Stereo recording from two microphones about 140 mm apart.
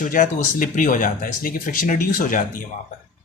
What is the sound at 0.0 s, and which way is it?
Speech, 70° left (ahead or behind).